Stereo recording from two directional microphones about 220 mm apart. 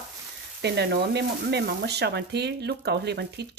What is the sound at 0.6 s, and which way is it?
Speech, 50° right (ahead or behind).